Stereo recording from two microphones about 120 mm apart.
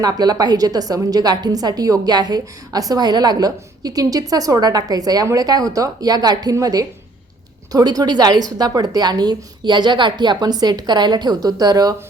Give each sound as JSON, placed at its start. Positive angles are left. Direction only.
{"t": 0.0, "sound": "a woman's voice", "side_deg": -35}